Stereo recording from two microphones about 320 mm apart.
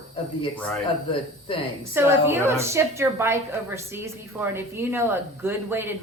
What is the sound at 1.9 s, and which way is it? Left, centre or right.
Speech, centre.